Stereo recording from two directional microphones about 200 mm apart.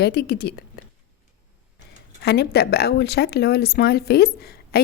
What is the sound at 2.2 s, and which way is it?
A woman's voice, 55° left (ahead or behind).